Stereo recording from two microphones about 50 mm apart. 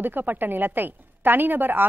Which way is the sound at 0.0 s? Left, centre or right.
Right.